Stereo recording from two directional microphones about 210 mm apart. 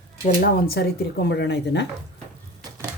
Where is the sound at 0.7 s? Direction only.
50° left (ahead or behind).